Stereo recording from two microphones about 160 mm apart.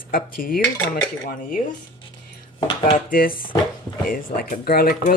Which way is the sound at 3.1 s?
65° left (ahead or behind).